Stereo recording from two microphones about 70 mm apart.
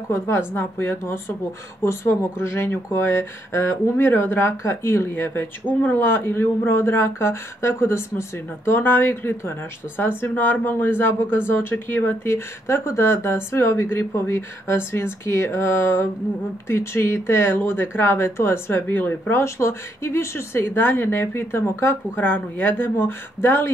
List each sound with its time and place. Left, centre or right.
0.1 s speech: left